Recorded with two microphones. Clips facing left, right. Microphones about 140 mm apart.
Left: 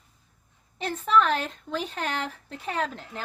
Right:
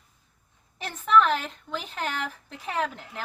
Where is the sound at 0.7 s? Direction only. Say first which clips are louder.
Right 1 dB; 35° left (ahead or behind).